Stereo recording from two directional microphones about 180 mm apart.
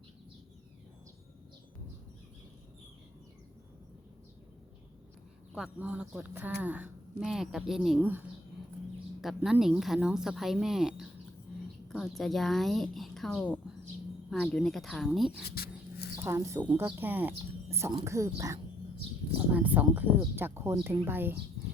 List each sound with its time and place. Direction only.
5.5 s speech: 5° right (ahead or behind)
9.2 s speech: centre (ahead or behind)
15.4 s a sound: 60° left (ahead or behind)
16.1 s speech: 15° right (ahead or behind)